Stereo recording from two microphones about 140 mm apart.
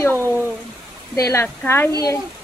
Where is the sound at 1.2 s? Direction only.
20° left (ahead or behind).